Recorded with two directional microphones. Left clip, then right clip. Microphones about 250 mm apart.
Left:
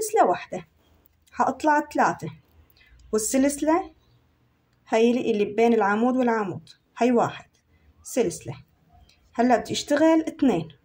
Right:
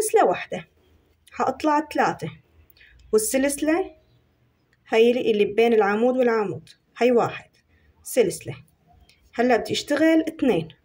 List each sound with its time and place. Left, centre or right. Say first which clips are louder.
0.1 s a woman's voice: even; centre
4.8 s a woman's voice: right 3 dB; centre